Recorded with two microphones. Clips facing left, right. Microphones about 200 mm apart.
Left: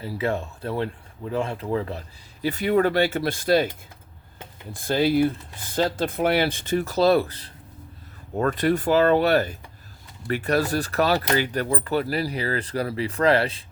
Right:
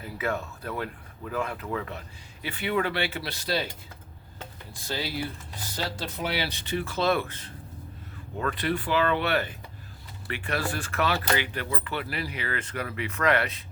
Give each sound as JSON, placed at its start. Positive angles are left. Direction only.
{"t": 0.0, "sound": "speech", "side_deg": 30}
{"t": 4.7, "sound": "speech", "side_deg": 50}